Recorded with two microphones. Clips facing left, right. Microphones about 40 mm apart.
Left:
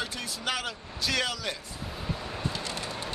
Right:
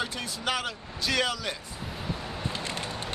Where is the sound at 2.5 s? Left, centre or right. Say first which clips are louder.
Right 1 dB; right.